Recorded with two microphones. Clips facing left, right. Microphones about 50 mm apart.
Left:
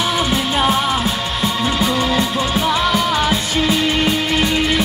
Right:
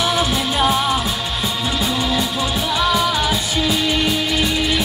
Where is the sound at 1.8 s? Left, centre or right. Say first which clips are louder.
Left 2 dB; left.